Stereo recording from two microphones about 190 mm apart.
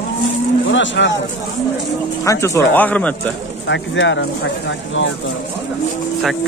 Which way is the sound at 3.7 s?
75° left (ahead or behind).